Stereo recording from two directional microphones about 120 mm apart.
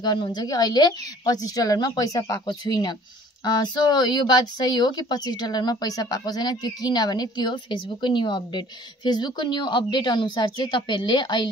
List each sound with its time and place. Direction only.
0.0 s speech: 35° left (ahead or behind)